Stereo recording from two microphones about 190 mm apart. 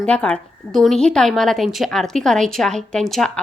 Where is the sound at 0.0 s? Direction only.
5° left (ahead or behind).